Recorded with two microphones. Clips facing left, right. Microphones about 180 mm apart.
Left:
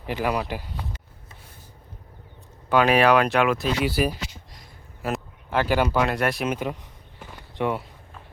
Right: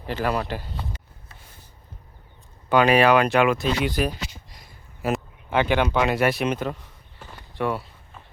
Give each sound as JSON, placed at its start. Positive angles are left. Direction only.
{"t": 0.0, "sound": "speech", "side_deg": 10}
{"t": 2.6, "sound": "speech", "side_deg": 0}
{"t": 7.2, "sound": "walk", "side_deg": 15}